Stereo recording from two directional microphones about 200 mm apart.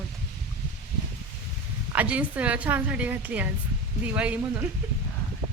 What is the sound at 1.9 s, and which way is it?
A woman's voice, 5° right (ahead or behind).